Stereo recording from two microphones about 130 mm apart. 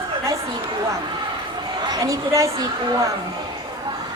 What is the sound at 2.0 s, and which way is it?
Speech, 25° right (ahead or behind).